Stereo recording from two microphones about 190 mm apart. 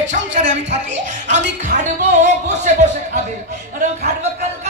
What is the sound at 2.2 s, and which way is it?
Music, 40° right (ahead or behind).